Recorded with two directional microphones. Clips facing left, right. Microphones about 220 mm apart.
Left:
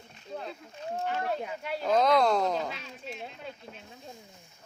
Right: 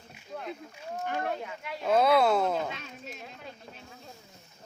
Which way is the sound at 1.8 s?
5° right (ahead or behind).